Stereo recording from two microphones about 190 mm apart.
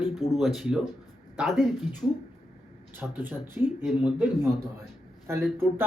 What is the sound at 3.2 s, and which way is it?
A man's voice, 10° right (ahead or behind).